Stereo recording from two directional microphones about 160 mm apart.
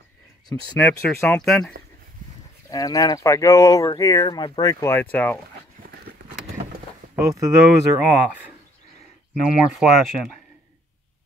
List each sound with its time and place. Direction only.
0.7 s speech: 10° left (ahead or behind)
2.7 s speech: 25° left (ahead or behind)
7.2 s speech: 20° right (ahead or behind)
9.8 s speech: centre (ahead or behind)